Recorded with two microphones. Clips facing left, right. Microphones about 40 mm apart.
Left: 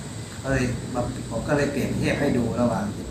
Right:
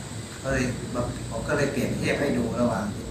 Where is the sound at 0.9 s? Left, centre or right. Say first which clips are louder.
Left 2 dB; centre.